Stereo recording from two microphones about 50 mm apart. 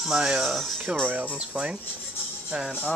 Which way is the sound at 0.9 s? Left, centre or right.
Right.